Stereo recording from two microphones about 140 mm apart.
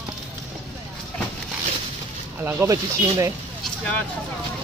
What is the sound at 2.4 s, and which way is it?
Speech, 20° right (ahead or behind).